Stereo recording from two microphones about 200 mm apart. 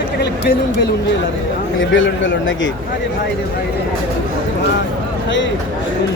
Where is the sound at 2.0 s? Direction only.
65° left (ahead or behind).